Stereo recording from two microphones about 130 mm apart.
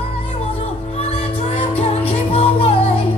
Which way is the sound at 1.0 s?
50° left (ahead or behind).